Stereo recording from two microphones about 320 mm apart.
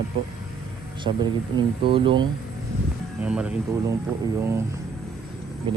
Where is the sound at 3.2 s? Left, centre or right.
Centre.